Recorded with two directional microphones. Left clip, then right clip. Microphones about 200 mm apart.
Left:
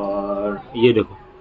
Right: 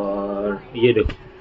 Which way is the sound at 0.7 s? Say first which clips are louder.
Left 1 dB; 30° left (ahead or behind).